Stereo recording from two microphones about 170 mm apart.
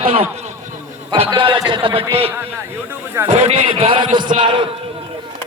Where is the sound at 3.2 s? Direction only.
40° right (ahead or behind).